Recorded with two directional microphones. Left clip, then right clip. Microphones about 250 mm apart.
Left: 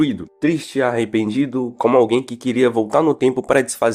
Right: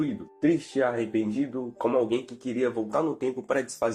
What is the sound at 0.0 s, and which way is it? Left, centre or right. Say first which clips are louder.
Speech: left 8 dB; left.